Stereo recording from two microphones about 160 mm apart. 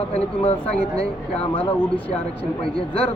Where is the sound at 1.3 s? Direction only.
35° left (ahead or behind).